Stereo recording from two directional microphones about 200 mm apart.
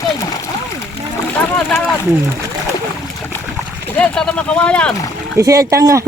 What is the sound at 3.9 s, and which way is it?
Speech, 10° left (ahead or behind).